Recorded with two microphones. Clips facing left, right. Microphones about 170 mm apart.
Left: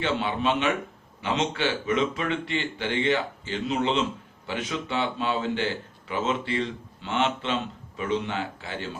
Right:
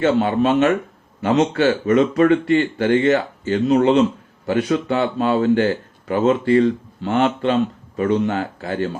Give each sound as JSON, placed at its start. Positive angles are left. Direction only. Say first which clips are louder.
{"t": 0.0, "sound": "speech", "louder": "right 9 dB", "side_deg": -45}